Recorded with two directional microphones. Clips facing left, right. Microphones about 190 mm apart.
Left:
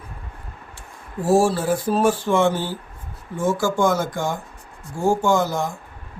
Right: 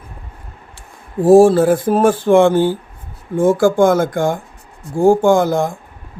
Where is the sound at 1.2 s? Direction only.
55° right (ahead or behind).